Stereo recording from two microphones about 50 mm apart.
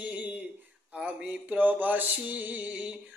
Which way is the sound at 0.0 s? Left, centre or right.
Right.